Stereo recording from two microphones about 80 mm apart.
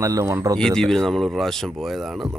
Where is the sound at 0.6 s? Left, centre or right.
Centre.